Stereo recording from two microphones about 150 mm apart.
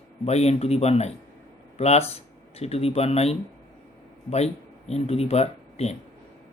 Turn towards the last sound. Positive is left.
turn(degrees=45)  # may be behind; listen again after turning